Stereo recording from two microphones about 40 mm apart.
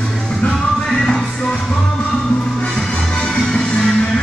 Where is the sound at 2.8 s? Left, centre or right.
Centre.